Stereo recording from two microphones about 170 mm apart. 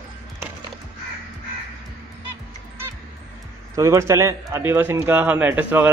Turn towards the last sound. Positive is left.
turn(degrees=-10)  # may be behind; listen again after turning